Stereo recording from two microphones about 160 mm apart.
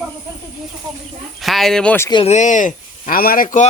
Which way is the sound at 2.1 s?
35° left (ahead or behind).